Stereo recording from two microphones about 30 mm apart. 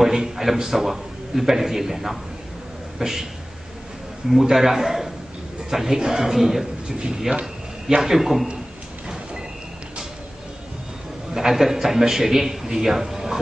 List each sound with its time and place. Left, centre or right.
0.0 s a man's voice: centre
4.3 s a man's voice: centre
11.3 s a man's voice: centre